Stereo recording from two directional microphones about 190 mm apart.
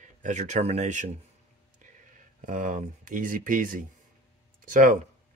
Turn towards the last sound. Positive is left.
turn(degrees=-45)  # may be behind; listen again after turning